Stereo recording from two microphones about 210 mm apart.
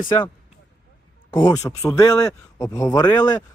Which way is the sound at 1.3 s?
20° left (ahead or behind).